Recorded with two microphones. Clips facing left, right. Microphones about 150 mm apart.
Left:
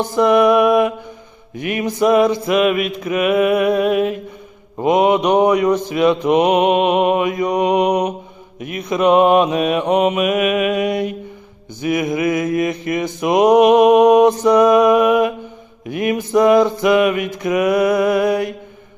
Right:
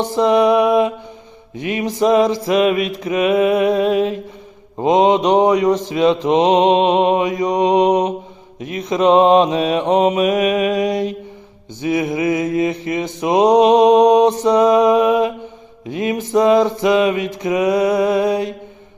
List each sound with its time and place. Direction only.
0.0 s mantra: 25° right (ahead or behind)